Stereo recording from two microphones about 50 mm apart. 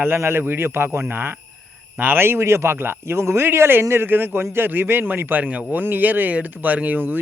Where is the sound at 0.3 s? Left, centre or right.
Right.